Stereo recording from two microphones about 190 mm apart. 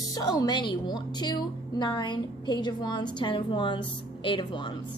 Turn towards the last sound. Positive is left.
turn(degrees=25)  # may be behind; listen again after turning